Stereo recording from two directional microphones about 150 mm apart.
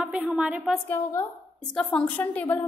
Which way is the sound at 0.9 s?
20° left (ahead or behind).